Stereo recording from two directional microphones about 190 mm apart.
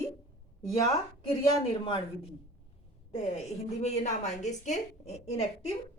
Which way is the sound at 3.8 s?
35° left (ahead or behind).